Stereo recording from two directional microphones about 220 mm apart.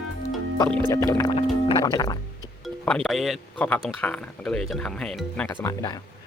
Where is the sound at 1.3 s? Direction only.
25° left (ahead or behind).